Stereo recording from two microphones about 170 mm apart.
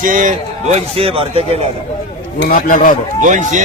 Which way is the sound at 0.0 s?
50° right (ahead or behind).